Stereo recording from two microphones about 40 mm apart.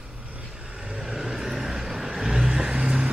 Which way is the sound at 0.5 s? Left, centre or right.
Right.